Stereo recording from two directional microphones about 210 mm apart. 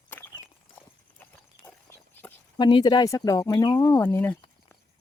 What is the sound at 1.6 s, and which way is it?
Speech, 10° left (ahead or behind).